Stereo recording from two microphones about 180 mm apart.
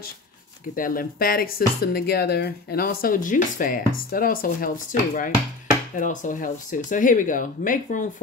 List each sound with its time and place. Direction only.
0.7 s speech: 50° left (ahead or behind)